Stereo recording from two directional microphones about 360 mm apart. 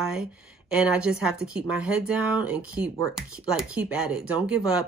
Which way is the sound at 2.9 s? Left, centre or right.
Centre.